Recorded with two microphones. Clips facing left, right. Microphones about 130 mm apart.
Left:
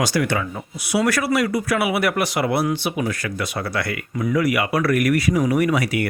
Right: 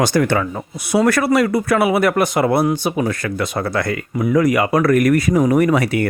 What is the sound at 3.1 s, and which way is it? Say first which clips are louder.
Speech: right 5 dB; 50° right (ahead or behind).